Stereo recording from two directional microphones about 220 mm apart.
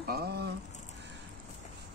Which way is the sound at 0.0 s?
45° right (ahead or behind).